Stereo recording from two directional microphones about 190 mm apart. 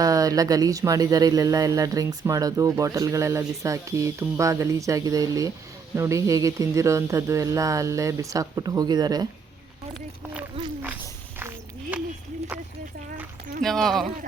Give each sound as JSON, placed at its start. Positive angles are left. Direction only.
{"t": 0.0, "sound": "speech", "side_deg": -20}
{"t": 11.3, "sound": "a sound", "side_deg": -10}
{"t": 13.6, "sound": "speech", "side_deg": 0}